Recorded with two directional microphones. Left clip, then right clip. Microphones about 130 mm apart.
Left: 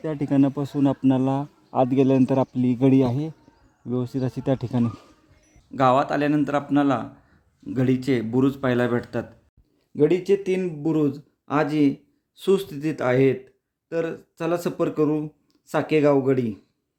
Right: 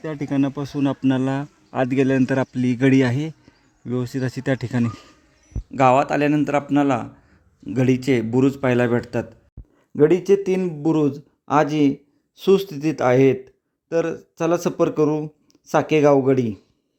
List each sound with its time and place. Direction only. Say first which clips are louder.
0.0 s speech: left 1 dB; 15° left (ahead or behind)
5.7 s speech: right 3 dB; 15° right (ahead or behind)